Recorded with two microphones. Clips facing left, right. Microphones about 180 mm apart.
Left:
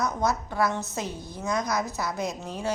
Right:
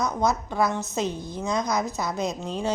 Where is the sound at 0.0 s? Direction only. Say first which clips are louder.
Right 2 dB; 15° right (ahead or behind).